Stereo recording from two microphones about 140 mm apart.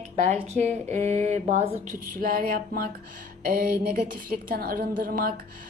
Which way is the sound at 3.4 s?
90° right.